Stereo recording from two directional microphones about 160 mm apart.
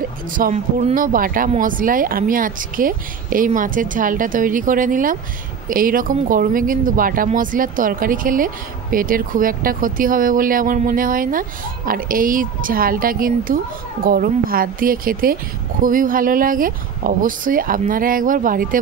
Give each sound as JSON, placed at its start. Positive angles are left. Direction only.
{"t": 0.3, "sound": "speech", "side_deg": -60}